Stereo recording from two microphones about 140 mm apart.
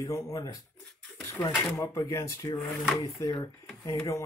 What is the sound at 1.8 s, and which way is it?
Speech, 25° left (ahead or behind).